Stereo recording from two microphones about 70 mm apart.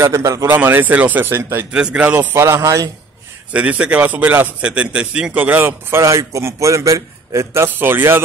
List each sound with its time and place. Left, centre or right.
0.0 s a man's voice: right
0.5 s speech: right
1.3 s a man's voice: right
1.7 s speech: centre
2.3 s a man's voice: right
2.6 s a man's voice: right
3.5 s speech: right
4.6 s a man's voice: centre
5.3 s a man's voice: right